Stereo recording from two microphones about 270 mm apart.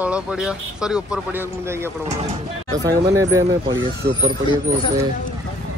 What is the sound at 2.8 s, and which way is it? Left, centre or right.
A man's voice, centre.